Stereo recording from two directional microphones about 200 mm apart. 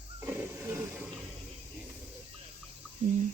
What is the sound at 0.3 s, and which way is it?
Hiss, 10° right (ahead or behind).